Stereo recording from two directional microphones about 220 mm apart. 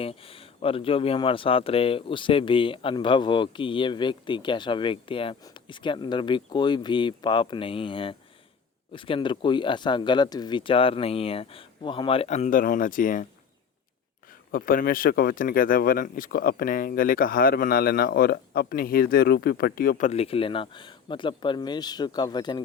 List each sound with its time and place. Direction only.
0.0 s speech: 25° left (ahead or behind)
14.5 s speech: 40° left (ahead or behind); by 22.6 s 20° left (ahead or behind)